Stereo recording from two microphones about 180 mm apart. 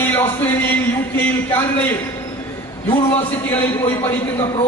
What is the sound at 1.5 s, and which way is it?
Speech, 10° left (ahead or behind).